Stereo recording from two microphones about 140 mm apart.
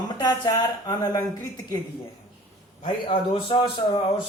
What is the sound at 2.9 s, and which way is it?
Speech, 40° left (ahead or behind).